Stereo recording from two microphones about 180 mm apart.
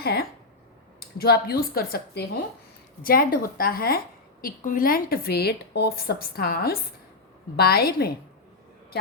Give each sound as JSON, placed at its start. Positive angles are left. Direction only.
{"t": 0.0, "sound": "a woman's voice", "side_deg": 60}